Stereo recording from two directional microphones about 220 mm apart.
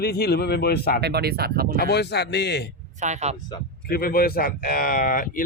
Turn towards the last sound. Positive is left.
turn(degrees=40)  # may be behind; listen again after turning